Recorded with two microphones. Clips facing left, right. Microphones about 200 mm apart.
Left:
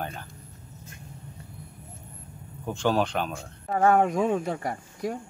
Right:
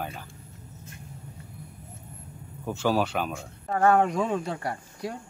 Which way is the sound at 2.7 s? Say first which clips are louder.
Even; 5° right (ahead or behind).